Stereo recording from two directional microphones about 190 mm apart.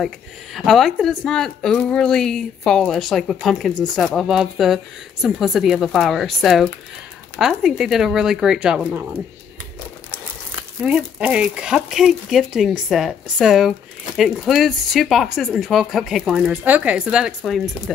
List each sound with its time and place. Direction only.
0.6 s speech: centre (ahead or behind)
10.8 s speech: 5° right (ahead or behind)